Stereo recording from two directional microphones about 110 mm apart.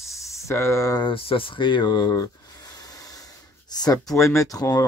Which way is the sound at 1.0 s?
55° left (ahead or behind).